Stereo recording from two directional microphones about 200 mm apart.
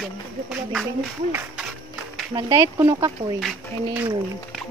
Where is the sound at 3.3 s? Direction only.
5° right (ahead or behind).